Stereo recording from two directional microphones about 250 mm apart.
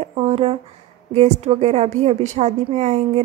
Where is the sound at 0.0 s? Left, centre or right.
Right.